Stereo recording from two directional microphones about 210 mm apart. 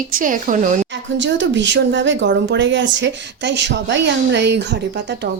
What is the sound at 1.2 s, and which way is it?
A woman's voice, 60° right (ahead or behind).